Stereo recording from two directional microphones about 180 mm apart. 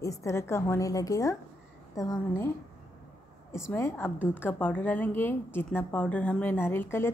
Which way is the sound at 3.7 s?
10° left (ahead or behind).